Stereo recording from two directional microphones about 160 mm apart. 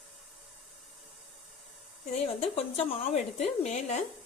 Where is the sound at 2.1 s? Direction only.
40° left (ahead or behind).